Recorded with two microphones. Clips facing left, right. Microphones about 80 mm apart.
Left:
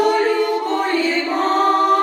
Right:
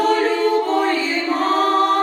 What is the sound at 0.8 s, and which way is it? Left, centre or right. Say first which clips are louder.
Chant: left 1 dB; centre.